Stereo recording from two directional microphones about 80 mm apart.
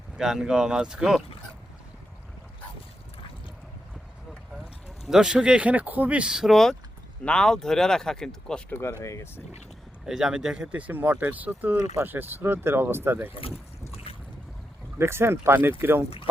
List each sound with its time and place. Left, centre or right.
0.2 s speech: centre
5.0 s speech: centre
8.7 s speech: left
10.1 s speech: centre; by 11.8 s right
11.8 s speech: right
12.1 s speech: right
14.9 s speech: right